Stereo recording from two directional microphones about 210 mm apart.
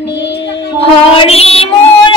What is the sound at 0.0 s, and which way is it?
Music, 55° left (ahead or behind).